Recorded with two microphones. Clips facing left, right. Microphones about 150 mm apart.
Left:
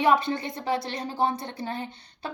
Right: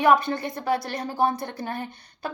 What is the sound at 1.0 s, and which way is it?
Speech, 55° right (ahead or behind).